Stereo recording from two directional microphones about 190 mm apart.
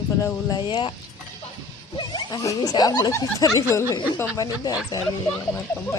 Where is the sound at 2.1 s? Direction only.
20° left (ahead or behind).